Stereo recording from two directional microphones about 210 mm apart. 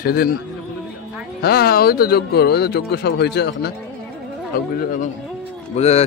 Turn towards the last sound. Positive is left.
turn(degrees=30)  # may be behind; listen again after turning